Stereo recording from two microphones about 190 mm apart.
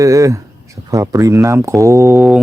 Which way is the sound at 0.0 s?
15° right (ahead or behind).